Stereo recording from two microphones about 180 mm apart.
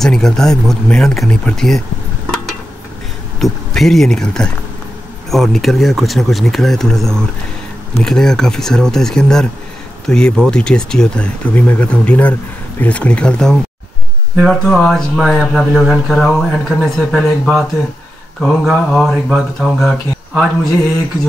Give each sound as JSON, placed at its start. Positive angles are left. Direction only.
{"t": 0.0, "sound": "speech", "side_deg": 0}
{"t": 3.3, "sound": "speech", "side_deg": 0}